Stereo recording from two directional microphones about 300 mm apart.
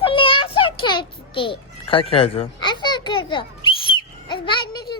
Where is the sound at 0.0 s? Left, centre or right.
Centre.